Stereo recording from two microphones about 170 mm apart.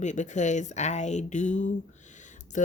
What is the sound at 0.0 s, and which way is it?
Speech, 45° left (ahead or behind).